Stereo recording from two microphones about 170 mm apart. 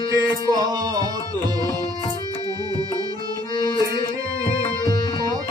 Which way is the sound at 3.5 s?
25° left (ahead or behind).